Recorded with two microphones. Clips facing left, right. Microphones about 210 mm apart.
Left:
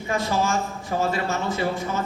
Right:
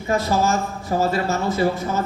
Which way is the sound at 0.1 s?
40° right (ahead or behind).